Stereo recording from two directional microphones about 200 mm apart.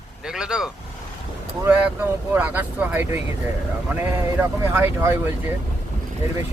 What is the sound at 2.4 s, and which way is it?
Vehicle, 10° right (ahead or behind).